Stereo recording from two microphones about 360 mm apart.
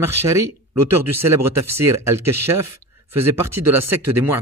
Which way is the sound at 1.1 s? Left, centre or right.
Centre.